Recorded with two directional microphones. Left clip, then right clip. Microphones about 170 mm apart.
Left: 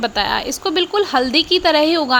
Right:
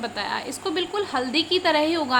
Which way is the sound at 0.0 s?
45° left (ahead or behind).